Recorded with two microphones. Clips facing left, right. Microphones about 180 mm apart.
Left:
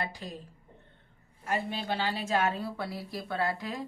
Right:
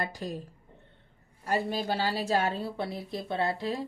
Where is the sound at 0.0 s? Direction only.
45° right (ahead or behind).